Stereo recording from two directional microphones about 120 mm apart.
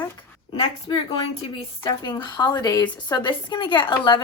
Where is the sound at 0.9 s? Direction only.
40° left (ahead or behind).